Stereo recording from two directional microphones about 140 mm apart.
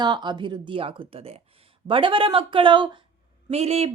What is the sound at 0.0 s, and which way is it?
Speech, 30° right (ahead or behind).